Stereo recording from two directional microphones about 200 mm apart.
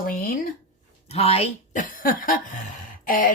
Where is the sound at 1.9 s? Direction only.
45° left (ahead or behind).